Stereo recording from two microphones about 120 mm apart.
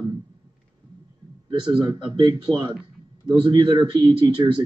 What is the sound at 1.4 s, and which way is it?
Speech, 40° right (ahead or behind).